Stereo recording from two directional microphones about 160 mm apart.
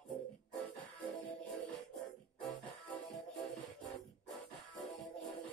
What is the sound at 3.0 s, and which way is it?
Music, centre (ahead or behind).